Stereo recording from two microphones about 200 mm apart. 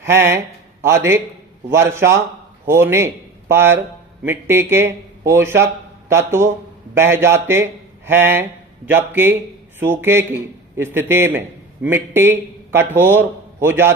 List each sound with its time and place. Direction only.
0.0 s a man's voice: 10° right (ahead or behind)